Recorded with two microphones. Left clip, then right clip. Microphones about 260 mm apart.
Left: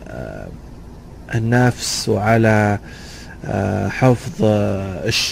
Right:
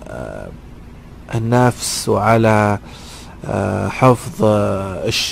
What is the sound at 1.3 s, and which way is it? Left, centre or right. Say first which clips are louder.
Speech: right 2 dB; centre.